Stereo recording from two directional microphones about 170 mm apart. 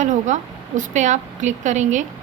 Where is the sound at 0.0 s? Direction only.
45° right (ahead or behind).